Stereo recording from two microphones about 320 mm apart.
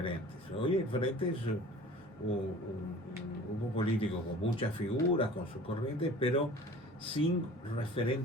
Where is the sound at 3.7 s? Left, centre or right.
Centre.